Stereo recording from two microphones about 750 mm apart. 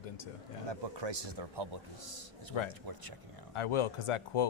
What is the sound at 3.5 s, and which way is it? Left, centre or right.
Speech, left.